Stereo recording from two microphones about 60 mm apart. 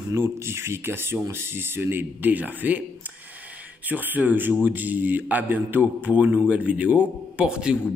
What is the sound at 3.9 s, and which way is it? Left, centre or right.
A man's voice, right.